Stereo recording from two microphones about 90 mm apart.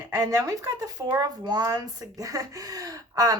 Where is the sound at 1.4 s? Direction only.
50° right (ahead or behind).